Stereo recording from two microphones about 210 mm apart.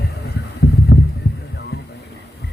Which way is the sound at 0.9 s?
60° left (ahead or behind).